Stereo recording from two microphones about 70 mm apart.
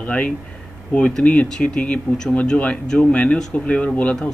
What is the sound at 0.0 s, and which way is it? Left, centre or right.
A man's voice, centre.